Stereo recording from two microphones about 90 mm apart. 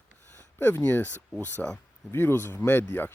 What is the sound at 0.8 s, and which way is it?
Speech, 20° left (ahead or behind).